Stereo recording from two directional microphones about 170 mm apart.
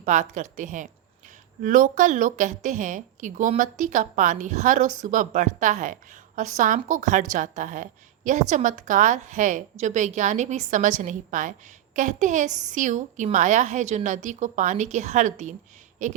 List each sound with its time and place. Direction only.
0.0 s a woman's voice: 45° right (ahead or behind)